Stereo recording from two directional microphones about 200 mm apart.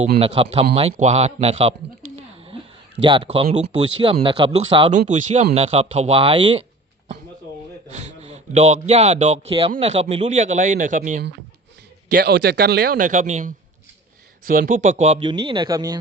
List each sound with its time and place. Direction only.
0.2 s speech: 30° right (ahead or behind)
4.9 s a man's voice: 35° right (ahead or behind)
7.9 s a man's voice: 35° right (ahead or behind)
12.0 s a man's voice: 55° right (ahead or behind); by 16.0 s 20° right (ahead or behind)